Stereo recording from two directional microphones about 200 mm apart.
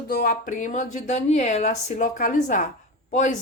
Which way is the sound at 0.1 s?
45° left (ahead or behind).